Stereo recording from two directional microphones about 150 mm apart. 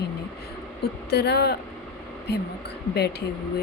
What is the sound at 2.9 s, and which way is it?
Speech, 90° left.